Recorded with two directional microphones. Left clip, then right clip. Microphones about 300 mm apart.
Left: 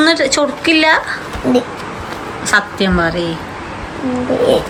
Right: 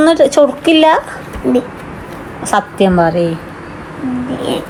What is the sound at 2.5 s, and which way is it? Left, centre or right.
Speech, centre.